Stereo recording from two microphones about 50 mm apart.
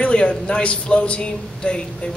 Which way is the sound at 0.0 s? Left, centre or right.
Left.